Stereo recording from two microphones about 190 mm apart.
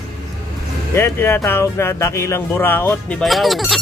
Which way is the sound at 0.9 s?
15° left (ahead or behind).